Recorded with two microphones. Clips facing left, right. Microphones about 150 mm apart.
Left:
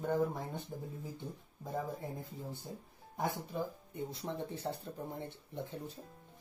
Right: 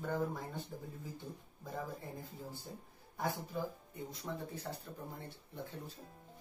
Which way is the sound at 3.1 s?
20° left (ahead or behind).